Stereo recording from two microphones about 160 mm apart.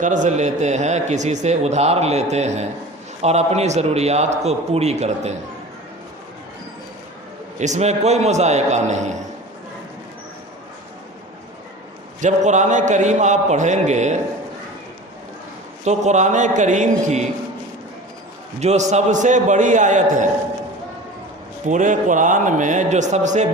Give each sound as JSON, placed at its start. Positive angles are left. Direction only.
{"t": 0.0, "sound": "a man's voice", "side_deg": -50}
{"t": 7.6, "sound": "a man's voice", "side_deg": -45}
{"t": 12.2, "sound": "a man's voice", "side_deg": -50}
{"t": 15.8, "sound": "a man's voice", "side_deg": -45}
{"t": 18.6, "sound": "a man's voice", "side_deg": -45}
{"t": 21.7, "sound": "a man's voice", "side_deg": -50}